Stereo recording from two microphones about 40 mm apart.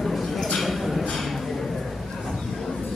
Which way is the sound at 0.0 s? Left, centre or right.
Centre.